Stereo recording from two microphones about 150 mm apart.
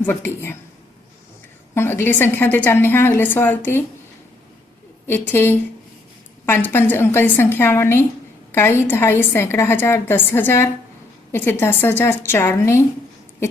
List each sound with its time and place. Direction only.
0.0 s a woman's voice: 15° left (ahead or behind)
1.7 s a woman's voice: 15° left (ahead or behind)
5.3 s a woman's voice: 15° left (ahead or behind)